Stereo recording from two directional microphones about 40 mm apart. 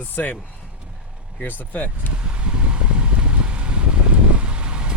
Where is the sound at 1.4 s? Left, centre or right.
Left.